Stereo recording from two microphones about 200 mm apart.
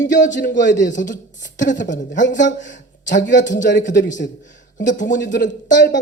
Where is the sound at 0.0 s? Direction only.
40° left (ahead or behind).